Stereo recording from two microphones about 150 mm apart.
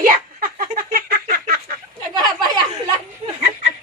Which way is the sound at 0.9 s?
75° right (ahead or behind).